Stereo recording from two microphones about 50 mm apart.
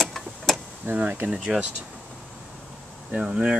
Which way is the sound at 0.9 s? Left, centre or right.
Right.